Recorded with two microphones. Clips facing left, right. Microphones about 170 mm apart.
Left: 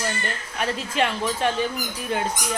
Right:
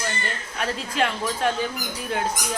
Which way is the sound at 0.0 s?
Centre (ahead or behind).